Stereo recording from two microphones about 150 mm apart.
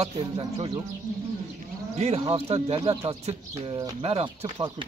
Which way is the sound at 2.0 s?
45° right (ahead or behind).